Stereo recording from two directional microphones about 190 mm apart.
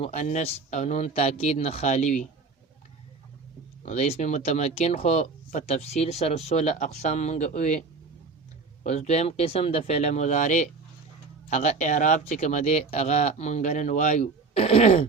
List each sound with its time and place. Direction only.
0.0 s speech: 35° left (ahead or behind)
3.8 s speech: 35° left (ahead or behind)